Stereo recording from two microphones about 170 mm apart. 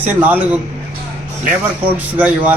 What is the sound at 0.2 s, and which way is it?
Speech, 10° right (ahead or behind).